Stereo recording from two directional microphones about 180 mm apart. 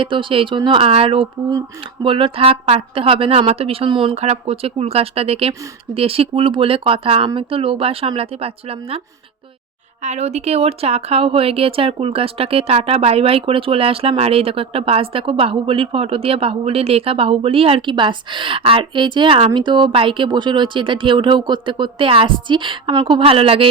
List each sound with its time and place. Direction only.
0.0 s speech: 30° right (ahead or behind)
10.0 s speech: 40° right (ahead or behind)